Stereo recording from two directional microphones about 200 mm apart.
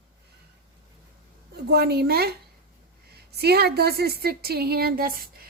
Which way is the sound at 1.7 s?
55° right (ahead or behind).